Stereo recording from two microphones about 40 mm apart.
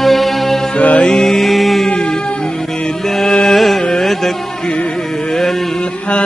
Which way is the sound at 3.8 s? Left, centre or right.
Centre.